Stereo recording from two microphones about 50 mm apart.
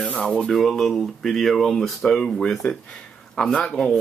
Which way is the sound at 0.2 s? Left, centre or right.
Left.